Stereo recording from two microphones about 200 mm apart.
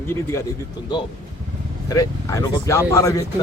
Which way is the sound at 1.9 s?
15° left (ahead or behind).